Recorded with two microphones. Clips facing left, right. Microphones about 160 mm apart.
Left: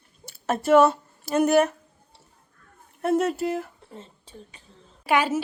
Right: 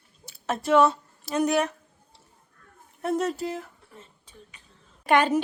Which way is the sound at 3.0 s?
Centre (ahead or behind).